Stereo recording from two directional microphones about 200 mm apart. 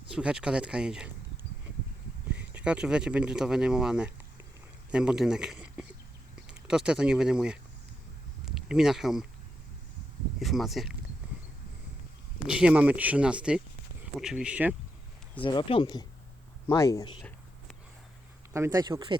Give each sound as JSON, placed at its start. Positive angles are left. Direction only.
{"t": 0.1, "sound": "speech", "side_deg": -5}
{"t": 2.3, "sound": "speech", "side_deg": -5}
{"t": 10.4, "sound": "speech", "side_deg": 0}
{"t": 12.5, "sound": "speech", "side_deg": -5}
{"t": 15.4, "sound": "speech", "side_deg": 25}
{"t": 18.5, "sound": "speech", "side_deg": -15}